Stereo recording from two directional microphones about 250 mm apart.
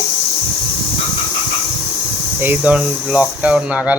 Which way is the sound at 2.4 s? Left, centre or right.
Centre.